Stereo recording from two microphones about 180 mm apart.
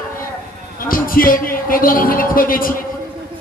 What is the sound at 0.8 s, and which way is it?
A man's voice, 50° left (ahead or behind).